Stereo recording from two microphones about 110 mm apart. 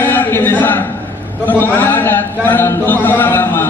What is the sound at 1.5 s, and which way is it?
A man's voice, 15° left (ahead or behind).